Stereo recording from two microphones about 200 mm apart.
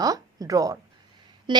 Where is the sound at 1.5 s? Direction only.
25° right (ahead or behind).